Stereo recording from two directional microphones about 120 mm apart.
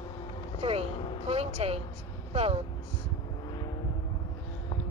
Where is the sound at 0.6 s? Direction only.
55° right (ahead or behind).